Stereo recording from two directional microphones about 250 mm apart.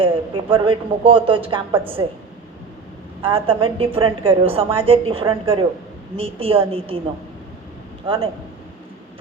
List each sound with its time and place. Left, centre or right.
0.0 s a woman's voice: right
3.2 s a woman's voice: right
8.1 s a woman's voice: right